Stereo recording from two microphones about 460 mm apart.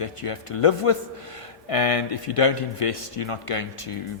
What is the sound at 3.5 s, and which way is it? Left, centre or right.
Speech, left.